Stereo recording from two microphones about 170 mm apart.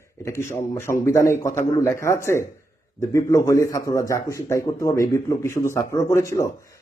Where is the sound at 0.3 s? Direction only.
15° left (ahead or behind).